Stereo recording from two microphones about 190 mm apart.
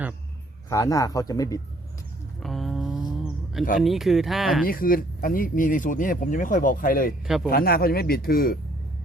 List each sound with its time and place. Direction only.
0.7 s speech: 15° left (ahead or behind)
2.4 s a sound: centre (ahead or behind)
3.8 s speech: centre (ahead or behind)
4.6 s speech: 50° left (ahead or behind)
7.3 s speech: centre (ahead or behind)
7.5 s speech: 55° left (ahead or behind)